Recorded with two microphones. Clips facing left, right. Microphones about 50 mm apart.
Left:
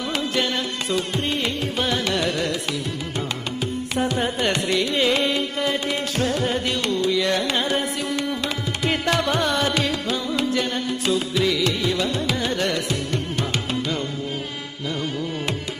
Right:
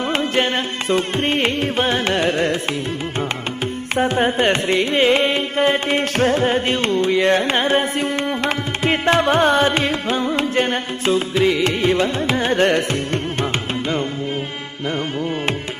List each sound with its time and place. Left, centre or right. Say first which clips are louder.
0.1 s carnatic music: right 4 dB; right
3.9 s carnatic music: right 7 dB; right